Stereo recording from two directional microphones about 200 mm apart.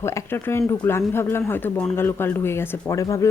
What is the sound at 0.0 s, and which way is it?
Speech, 10° left (ahead or behind).